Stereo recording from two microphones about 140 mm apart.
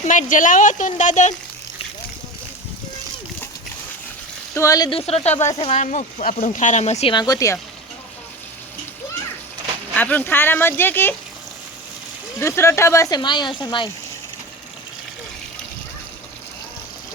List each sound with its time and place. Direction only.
0.0 s a woman's voice: 65° left (ahead or behind)
4.5 s speech: 25° left (ahead or behind)
4.9 s a woman's voice: 45° left (ahead or behind)
6.2 s a woman's voice: 80° left; by 7.1 s 50° left (ahead or behind)
7.1 s speech: 30° left (ahead or behind)
9.9 s speech: 10° left (ahead or behind)
12.4 s speech: 20° left (ahead or behind)